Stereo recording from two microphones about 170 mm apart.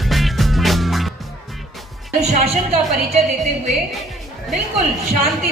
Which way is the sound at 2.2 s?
40° right (ahead or behind).